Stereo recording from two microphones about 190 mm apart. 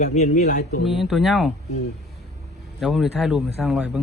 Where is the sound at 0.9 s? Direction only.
Centre (ahead or behind).